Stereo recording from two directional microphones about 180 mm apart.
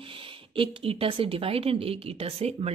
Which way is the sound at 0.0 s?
30° right (ahead or behind).